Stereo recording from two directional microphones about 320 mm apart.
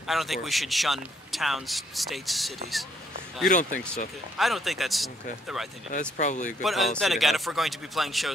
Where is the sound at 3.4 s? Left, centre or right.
Left.